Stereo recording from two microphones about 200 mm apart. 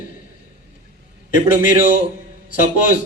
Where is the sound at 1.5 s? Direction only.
40° left (ahead or behind).